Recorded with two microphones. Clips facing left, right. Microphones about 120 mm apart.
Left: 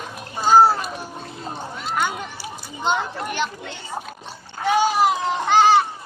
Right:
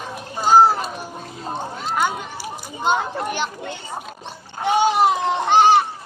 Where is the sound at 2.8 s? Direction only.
10° right (ahead or behind).